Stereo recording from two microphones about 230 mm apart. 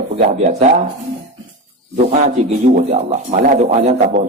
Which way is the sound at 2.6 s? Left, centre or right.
Right.